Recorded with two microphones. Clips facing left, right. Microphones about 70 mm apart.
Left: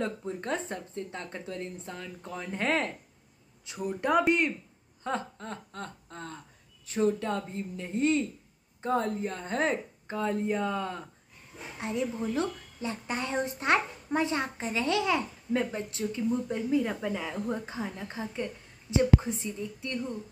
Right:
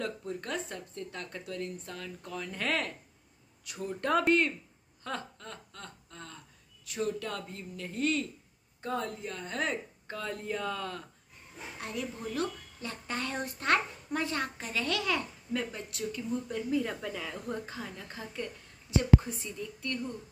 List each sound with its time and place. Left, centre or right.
0.0 s a woman's voice: left
3.6 s speech: centre
5.0 s a sound: left
6.9 s a woman's voice: left